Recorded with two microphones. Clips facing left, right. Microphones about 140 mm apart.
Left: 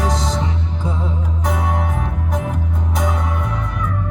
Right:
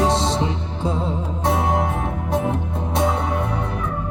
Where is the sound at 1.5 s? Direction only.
30° right (ahead or behind).